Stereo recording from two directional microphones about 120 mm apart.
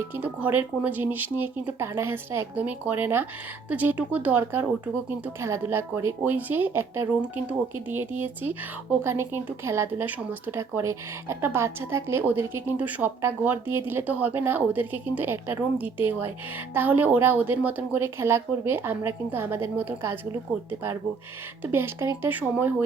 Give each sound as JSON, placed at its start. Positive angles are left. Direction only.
{"t": 0.1, "sound": "a woman's voice", "side_deg": -15}